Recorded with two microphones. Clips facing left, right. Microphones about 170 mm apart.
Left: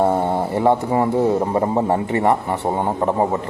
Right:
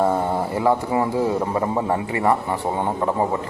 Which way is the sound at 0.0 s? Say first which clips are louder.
Left 2 dB; 25° left (ahead or behind).